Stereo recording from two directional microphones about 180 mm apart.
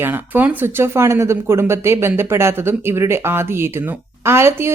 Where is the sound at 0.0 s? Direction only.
10° right (ahead or behind).